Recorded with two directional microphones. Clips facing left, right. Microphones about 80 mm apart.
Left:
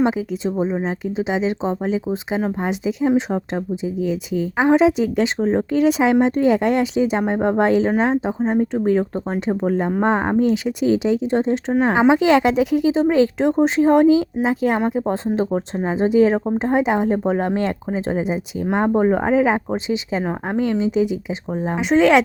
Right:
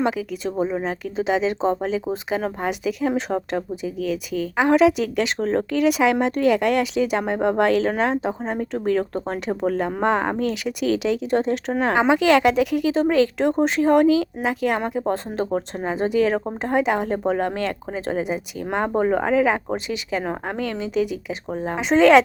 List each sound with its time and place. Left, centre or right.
0.0 s speech: left
21.5 s speech: centre